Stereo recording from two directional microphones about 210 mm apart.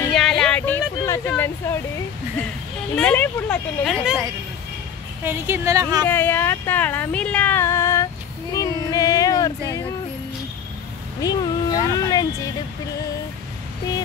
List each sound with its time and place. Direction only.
0.1 s a sound: centre (ahead or behind)
3.0 s speech: 5° left (ahead or behind)
5.2 s speech: 10° right (ahead or behind)
6.0 s speech: 10° left (ahead or behind)
11.1 s speech: 15° left (ahead or behind)